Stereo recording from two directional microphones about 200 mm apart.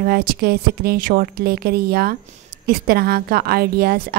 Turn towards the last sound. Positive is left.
turn(degrees=-50)  # may be behind; listen again after turning